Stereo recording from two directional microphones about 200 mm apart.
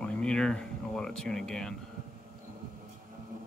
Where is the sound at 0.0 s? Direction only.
5° left (ahead or behind).